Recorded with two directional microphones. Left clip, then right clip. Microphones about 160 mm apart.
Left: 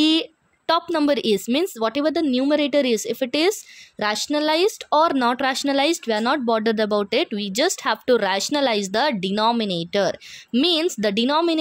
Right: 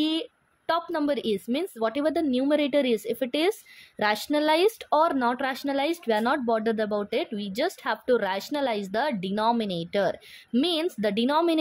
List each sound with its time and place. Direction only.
0.0 s speech: 25° left (ahead or behind)